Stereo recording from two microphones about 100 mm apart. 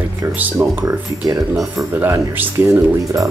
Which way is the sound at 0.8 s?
35° right (ahead or behind).